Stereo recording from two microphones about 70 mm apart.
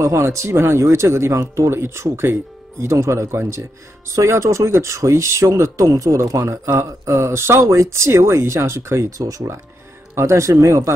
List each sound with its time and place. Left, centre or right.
0.0 s speech: right